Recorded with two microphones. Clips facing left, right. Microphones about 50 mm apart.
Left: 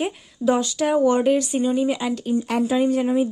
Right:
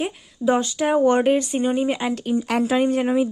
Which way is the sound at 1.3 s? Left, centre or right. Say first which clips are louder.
Even; right.